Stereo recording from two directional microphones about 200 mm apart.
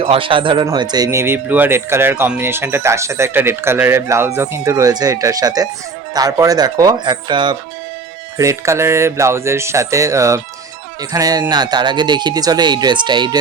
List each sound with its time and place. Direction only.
0.0 s speech: 25° right (ahead or behind)